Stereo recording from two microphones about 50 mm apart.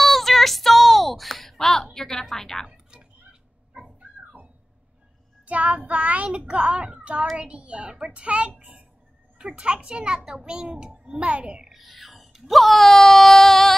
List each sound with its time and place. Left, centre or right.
0.0 s a sound: centre
2.7 s a sound: centre
3.7 s dog: right
5.4 s a child's voice: right
9.4 s a child's voice: right
11.7 s speech: centre